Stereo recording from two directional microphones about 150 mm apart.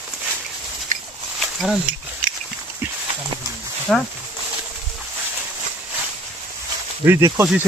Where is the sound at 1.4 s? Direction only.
Centre (ahead or behind).